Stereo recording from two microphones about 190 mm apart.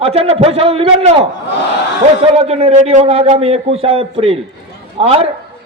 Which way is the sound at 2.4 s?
35° right (ahead or behind).